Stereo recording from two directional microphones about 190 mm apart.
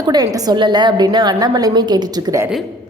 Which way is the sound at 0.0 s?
20° right (ahead or behind).